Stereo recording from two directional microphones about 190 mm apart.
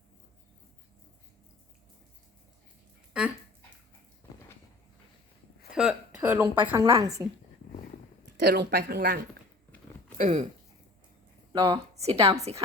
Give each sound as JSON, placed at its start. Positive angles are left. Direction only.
{"t": 3.1, "sound": "a sound", "side_deg": -5}
{"t": 5.7, "sound": "a woman's voice", "side_deg": -5}
{"t": 8.4, "sound": "speech", "side_deg": -55}
{"t": 10.2, "sound": "speech", "side_deg": -35}
{"t": 11.5, "sound": "speech", "side_deg": -25}
{"t": 12.1, "sound": "a woman's voice", "side_deg": -15}